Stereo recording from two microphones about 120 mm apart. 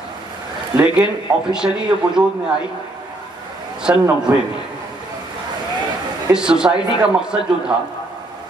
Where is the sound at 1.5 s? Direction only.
5° right (ahead or behind).